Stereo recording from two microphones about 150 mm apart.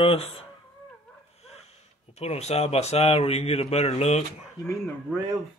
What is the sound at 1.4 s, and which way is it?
Speech, 45° left (ahead or behind).